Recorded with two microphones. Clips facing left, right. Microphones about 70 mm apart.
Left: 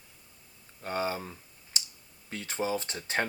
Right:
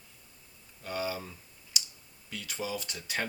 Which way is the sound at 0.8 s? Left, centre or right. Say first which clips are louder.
Left 3 dB; left.